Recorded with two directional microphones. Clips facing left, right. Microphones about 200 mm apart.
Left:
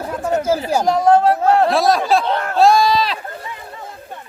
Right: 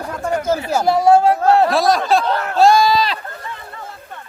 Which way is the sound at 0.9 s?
10° right (ahead or behind).